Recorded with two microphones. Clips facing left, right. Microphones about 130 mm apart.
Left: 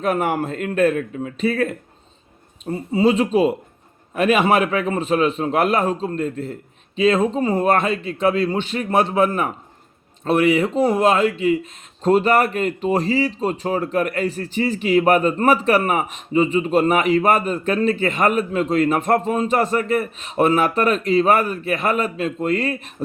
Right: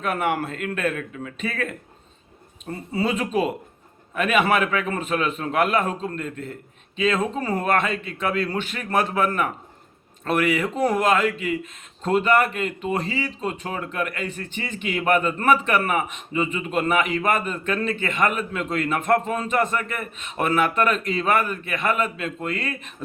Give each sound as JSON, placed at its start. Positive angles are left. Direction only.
{"t": 0.0, "sound": "a man's voice", "side_deg": 35}